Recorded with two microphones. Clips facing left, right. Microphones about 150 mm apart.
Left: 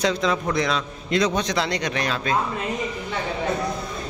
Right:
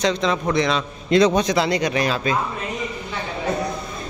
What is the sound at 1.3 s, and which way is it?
Speech, 5° right (ahead or behind).